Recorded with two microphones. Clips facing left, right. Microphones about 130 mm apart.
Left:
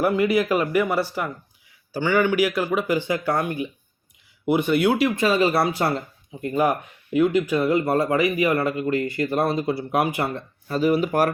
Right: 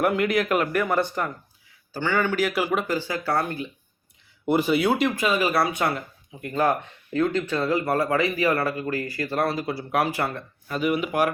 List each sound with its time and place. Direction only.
0.0 s speech: centre (ahead or behind)
2.5 s speech: centre (ahead or behind)
2.8 s speech: 15° left (ahead or behind)
4.4 s speech: centre (ahead or behind)
5.1 s speech: 30° left (ahead or behind)
6.4 s speech: 15° left (ahead or behind)
10.7 s speech: 35° left (ahead or behind)